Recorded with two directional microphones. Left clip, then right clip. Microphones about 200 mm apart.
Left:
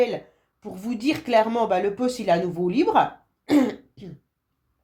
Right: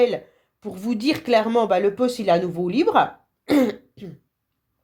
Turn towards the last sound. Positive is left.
turn(degrees=-35)  # may be behind; listen again after turning